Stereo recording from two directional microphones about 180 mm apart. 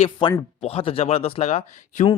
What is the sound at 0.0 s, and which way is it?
Speech, 30° left (ahead or behind).